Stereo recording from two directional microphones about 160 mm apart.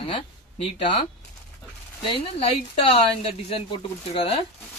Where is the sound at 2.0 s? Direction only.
35° left (ahead or behind).